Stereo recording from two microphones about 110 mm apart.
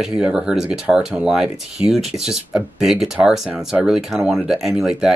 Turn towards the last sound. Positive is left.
turn(degrees=-5)  # may be behind; listen again after turning